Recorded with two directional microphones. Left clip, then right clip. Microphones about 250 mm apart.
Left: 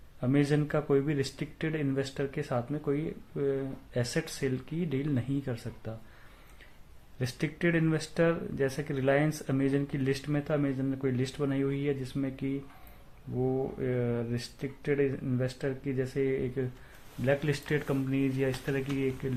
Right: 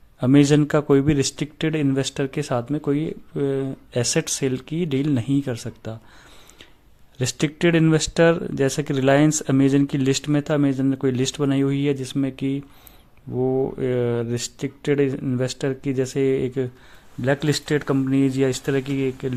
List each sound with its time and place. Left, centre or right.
0.2 s speech: right
7.2 s speech: right